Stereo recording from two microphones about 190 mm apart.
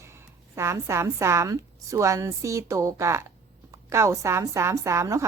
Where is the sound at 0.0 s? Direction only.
15° right (ahead or behind).